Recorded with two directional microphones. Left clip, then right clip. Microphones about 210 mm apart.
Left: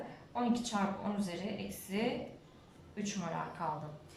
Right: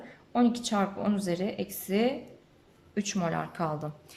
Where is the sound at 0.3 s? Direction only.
50° right (ahead or behind).